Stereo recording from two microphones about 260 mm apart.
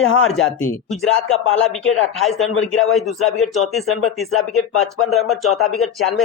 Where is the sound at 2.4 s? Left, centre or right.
Centre.